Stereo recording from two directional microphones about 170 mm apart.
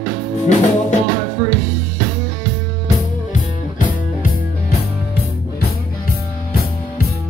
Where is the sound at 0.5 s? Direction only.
45° left (ahead or behind).